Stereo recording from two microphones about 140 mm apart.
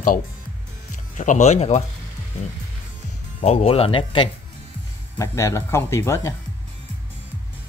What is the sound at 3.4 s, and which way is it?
Speech, 45° left (ahead or behind).